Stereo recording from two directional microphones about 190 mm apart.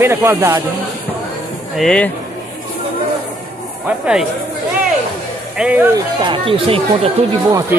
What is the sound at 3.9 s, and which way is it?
Speech, 5° right (ahead or behind).